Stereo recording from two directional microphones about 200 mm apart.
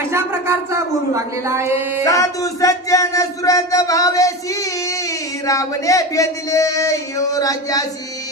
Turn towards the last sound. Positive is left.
turn(degrees=15)  # may be behind; listen again after turning